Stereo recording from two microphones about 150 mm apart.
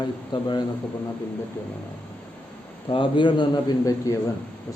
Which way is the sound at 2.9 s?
35° left (ahead or behind).